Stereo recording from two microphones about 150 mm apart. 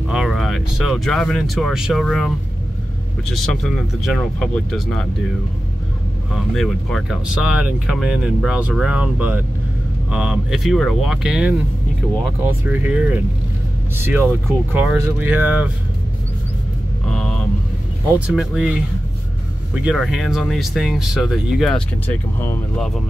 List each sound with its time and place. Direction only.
0.1 s speech: centre (ahead or behind)
6.3 s speech: 5° left (ahead or behind)
17.0 s vehicle: 5° left (ahead or behind)
18.2 s speech: 5° right (ahead or behind); by 22.6 s 15° left (ahead or behind)